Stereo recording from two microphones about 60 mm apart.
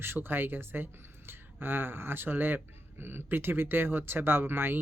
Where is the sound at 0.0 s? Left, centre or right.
Right.